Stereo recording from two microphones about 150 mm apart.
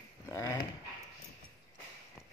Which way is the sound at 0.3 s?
15° left (ahead or behind).